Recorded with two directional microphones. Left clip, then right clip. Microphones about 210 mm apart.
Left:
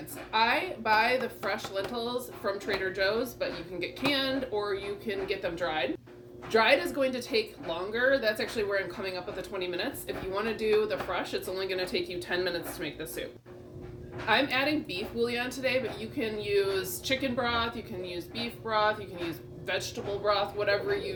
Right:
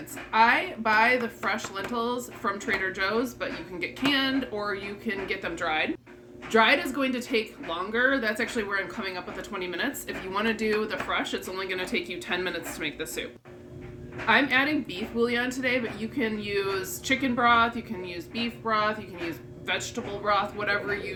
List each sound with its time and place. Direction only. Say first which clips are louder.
0.3 s a woman's voice: right 5 dB; 20° right (ahead or behind)
14.5 s a woman's voice: right 4 dB; 20° right (ahead or behind)
20.2 s a woman's voice: right 2 dB; 20° right (ahead or behind)